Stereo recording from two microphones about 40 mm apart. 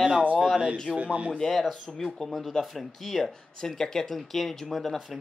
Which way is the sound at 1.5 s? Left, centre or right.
Centre.